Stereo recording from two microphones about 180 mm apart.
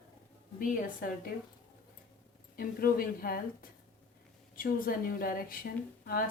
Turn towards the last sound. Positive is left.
turn(degrees=55)  # may be behind; listen again after turning